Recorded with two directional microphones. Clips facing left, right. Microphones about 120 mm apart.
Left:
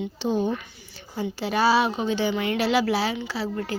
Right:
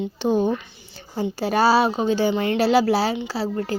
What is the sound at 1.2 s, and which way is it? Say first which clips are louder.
A woman's voice: right 4 dB; 40° right (ahead or behind).